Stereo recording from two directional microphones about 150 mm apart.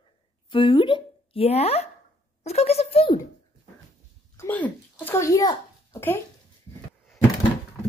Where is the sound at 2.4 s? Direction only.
45° left (ahead or behind).